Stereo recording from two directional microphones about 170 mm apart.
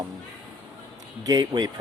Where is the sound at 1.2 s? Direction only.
25° right (ahead or behind).